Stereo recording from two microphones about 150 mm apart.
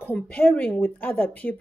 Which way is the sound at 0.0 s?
10° left (ahead or behind).